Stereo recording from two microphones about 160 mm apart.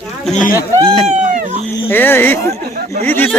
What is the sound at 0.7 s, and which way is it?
Speech, 25° right (ahead or behind).